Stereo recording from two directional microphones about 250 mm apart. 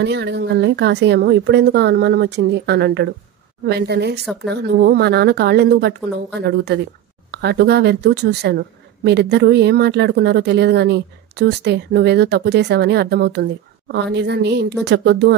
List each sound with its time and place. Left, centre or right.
0.0 s a woman's voice: right